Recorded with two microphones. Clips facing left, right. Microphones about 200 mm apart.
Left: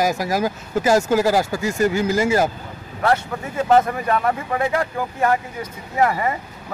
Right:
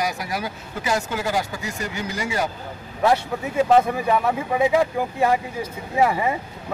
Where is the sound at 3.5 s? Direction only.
5° right (ahead or behind).